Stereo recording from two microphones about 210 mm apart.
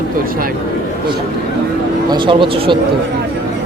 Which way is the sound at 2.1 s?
25° right (ahead or behind).